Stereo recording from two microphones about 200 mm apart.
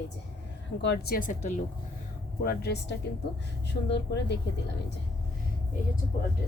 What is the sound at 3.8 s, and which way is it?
Speech, 60° left (ahead or behind).